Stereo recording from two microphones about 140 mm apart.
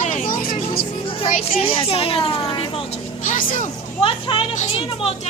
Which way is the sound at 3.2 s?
70° left (ahead or behind).